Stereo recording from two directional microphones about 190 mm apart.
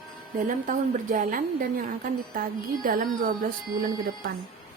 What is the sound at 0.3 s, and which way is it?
A woman's voice, 45° right (ahead or behind).